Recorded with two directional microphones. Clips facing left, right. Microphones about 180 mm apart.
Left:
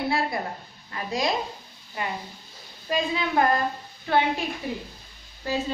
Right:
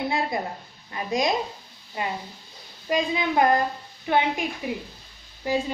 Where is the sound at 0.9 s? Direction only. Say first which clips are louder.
Right 2 dB; 20° right (ahead or behind).